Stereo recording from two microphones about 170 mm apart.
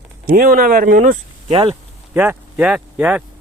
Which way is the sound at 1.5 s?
30° right (ahead or behind).